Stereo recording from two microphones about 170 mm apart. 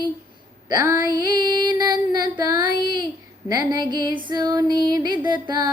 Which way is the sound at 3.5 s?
25° right (ahead or behind).